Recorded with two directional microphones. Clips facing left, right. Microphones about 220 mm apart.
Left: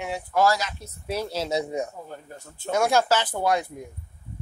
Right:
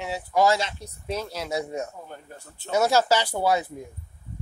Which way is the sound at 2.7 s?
5° right (ahead or behind).